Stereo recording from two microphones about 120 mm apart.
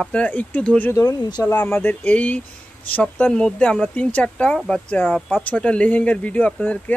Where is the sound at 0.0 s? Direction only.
10° left (ahead or behind).